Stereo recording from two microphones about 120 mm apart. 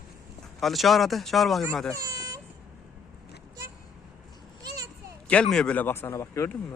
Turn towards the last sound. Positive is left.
turn(degrees=25)  # may be behind; listen again after turning